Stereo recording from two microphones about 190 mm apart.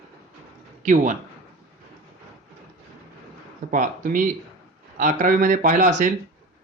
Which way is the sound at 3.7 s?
45° right (ahead or behind).